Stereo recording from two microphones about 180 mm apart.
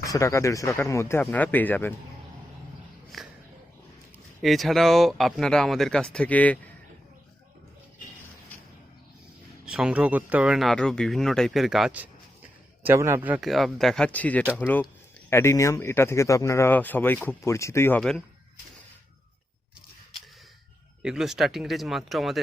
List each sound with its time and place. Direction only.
0.0 s speech: 20° left (ahead or behind)
3.1 s a sound: centre (ahead or behind)
4.4 s speech: centre (ahead or behind)
9.6 s speech: 5° right (ahead or behind)
14.4 s speech: 5° right (ahead or behind)
15.3 s speech: 15° left (ahead or behind)
21.0 s speech: 5° right (ahead or behind)